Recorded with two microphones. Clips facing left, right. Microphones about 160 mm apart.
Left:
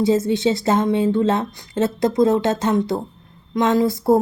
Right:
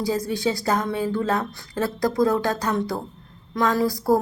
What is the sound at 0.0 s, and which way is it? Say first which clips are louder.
A woman's voice: left 6 dB; 25° left (ahead or behind).